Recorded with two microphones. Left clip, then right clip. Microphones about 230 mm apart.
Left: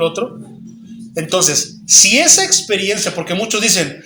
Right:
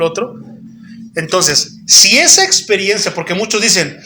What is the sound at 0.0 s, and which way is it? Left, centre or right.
A man's voice, centre.